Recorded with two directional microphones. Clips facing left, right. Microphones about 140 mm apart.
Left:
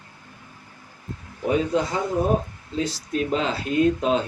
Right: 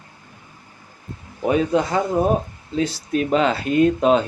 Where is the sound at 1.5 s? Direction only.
65° right (ahead or behind).